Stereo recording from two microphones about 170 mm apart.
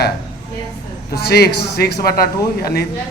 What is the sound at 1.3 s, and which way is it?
A man's voice, 70° left (ahead or behind).